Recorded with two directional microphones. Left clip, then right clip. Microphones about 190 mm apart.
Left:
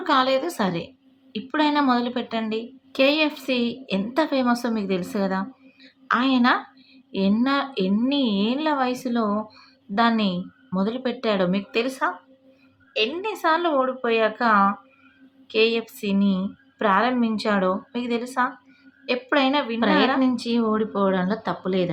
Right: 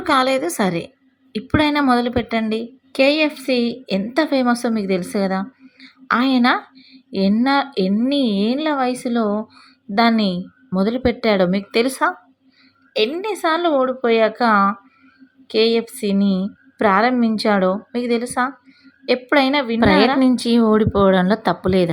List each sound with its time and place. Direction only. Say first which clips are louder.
0.0 s a woman's voice: right 3 dB; 30° right (ahead or behind)
13.2 s a woman's voice: right 3 dB; 30° right (ahead or behind)